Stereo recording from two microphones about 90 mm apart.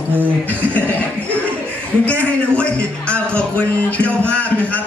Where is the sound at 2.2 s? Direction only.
15° left (ahead or behind).